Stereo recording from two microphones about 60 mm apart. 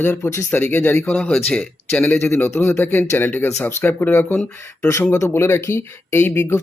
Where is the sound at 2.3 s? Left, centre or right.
Left.